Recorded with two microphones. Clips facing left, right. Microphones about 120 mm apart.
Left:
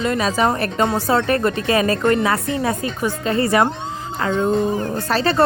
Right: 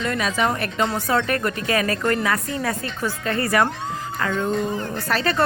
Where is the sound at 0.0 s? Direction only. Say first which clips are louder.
Left 4 dB; 30° left (ahead or behind).